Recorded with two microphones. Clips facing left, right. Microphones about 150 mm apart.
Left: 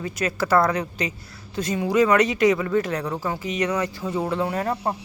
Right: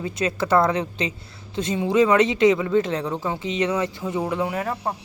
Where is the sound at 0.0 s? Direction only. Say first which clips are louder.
Right 1 dB; 25° right (ahead or behind).